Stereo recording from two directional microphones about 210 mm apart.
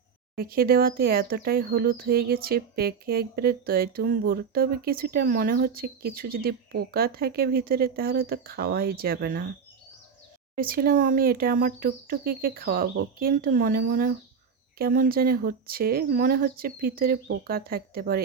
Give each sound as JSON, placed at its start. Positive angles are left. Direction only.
{"t": 0.3, "sound": "speech", "side_deg": -45}
{"t": 10.5, "sound": "speech", "side_deg": -45}